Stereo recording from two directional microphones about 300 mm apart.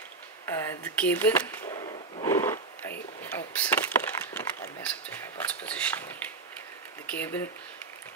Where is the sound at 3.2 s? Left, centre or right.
Centre.